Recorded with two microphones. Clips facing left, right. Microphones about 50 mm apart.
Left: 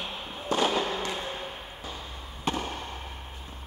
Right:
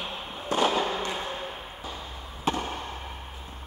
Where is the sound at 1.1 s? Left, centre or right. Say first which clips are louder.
Right 1 dB; centre.